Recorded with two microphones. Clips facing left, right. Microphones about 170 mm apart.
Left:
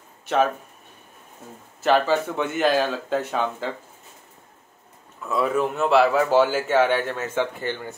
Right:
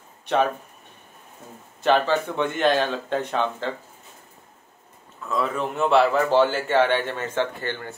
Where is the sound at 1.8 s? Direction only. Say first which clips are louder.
Left 1 dB; 5° left (ahead or behind).